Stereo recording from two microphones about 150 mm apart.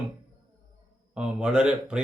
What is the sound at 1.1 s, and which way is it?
Speech, 5° right (ahead or behind).